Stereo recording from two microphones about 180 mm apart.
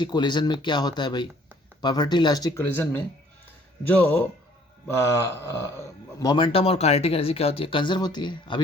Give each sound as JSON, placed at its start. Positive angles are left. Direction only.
{"t": 0.0, "sound": "speech", "side_deg": 25}